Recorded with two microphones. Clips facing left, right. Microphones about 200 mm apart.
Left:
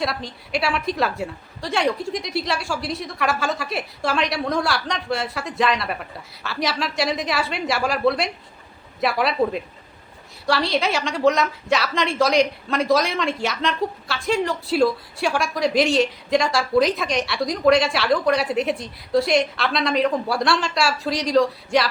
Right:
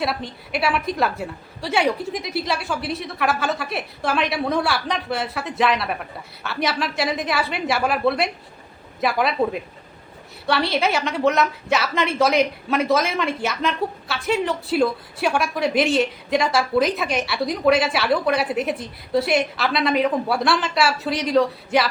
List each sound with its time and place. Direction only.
0.0 s a woman's voice: 5° right (ahead or behind)